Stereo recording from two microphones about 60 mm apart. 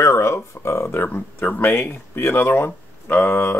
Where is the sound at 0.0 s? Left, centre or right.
Left.